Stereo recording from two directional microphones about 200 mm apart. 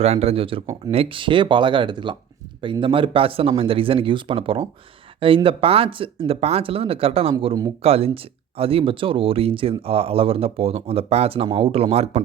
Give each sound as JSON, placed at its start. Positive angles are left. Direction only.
{"t": 0.0, "sound": "speech", "side_deg": -30}